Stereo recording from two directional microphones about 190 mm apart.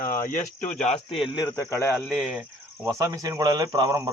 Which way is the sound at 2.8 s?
15° right (ahead or behind).